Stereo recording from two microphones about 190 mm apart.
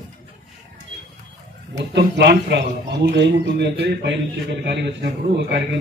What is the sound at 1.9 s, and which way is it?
A man's voice, 60° right (ahead or behind).